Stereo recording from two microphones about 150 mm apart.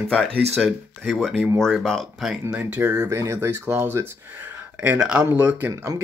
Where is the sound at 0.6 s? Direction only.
Centre (ahead or behind).